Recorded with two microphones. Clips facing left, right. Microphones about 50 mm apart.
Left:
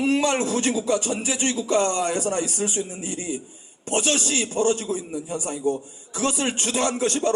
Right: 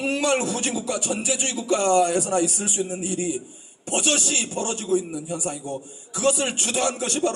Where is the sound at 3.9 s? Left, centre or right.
Left.